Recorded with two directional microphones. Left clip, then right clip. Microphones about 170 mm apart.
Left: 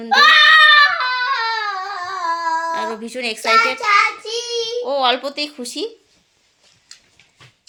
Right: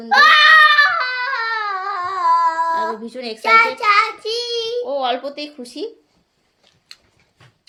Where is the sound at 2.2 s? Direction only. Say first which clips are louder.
Right 5 dB; 35° right (ahead or behind).